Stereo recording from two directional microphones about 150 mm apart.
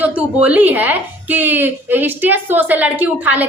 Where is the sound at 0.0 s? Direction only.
10° right (ahead or behind).